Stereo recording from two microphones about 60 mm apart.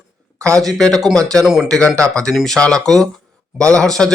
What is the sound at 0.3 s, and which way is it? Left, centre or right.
Speech, right.